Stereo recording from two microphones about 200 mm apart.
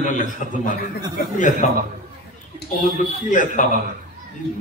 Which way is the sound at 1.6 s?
40° left (ahead or behind).